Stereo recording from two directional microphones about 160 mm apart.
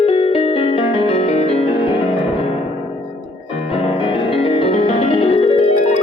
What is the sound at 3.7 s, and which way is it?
Music, 35° left (ahead or behind).